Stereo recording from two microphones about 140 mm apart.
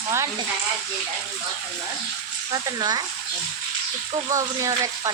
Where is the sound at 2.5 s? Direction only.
30° right (ahead or behind).